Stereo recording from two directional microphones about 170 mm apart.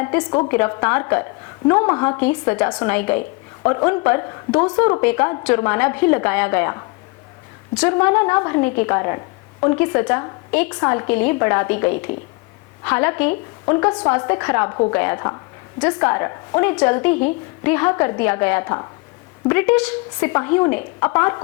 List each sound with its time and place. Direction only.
0.0 s a woman's voice: 20° left (ahead or behind)